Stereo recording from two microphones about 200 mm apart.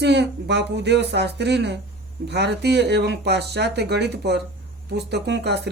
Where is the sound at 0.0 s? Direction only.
60° right (ahead or behind).